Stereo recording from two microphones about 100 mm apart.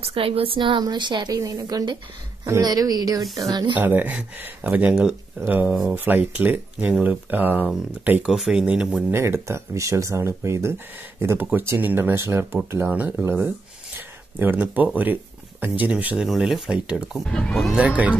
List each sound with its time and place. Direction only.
0.0 s a woman's voice: 70° right (ahead or behind); by 3.6 s 35° right (ahead or behind)
3.7 s speech: 20° right (ahead or behind)
9.1 s speech: 25° right (ahead or behind)
13.9 s a sound: 20° right (ahead or behind)
15.6 s speech: 15° right (ahead or behind)
16.3 s speech: centre (ahead or behind)
17.3 s speech: 10° left (ahead or behind)
17.7 s speech: 10° right (ahead or behind)